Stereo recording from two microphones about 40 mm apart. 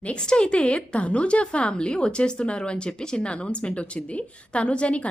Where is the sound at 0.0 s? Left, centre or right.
Left.